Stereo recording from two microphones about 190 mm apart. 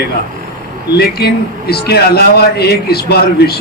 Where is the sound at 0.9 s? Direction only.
55° left (ahead or behind).